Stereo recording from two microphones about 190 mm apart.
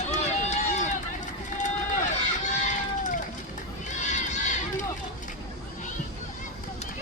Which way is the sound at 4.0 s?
40° left (ahead or behind).